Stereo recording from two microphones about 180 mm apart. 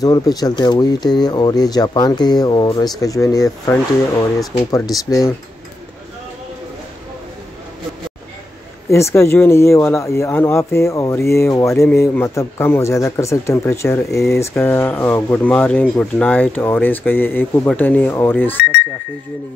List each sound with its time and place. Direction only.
0.0 s speech: 20° left (ahead or behind)
8.9 s speech: 15° left (ahead or behind)